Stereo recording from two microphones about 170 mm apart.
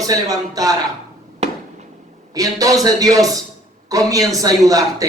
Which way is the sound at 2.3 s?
20° right (ahead or behind).